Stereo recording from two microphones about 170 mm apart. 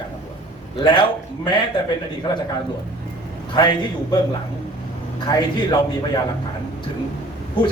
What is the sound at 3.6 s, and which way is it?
Speech, 25° left (ahead or behind).